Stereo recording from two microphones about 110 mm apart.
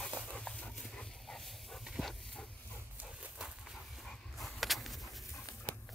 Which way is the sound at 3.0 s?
10° right (ahead or behind).